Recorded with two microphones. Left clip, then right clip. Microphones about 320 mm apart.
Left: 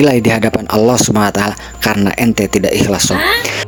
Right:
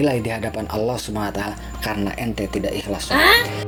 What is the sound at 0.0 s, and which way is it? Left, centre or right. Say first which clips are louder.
Speech: left 10 dB; left.